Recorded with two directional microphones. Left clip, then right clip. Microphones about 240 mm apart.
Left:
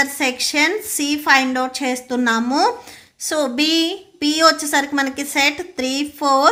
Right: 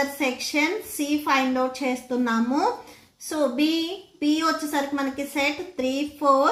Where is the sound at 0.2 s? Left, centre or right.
Left.